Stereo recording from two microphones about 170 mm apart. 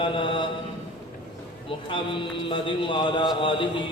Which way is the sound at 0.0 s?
30° left (ahead or behind).